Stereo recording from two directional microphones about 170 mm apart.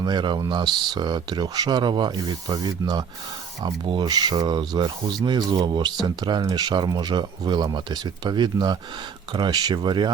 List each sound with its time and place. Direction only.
0.0 s speech: 25° right (ahead or behind)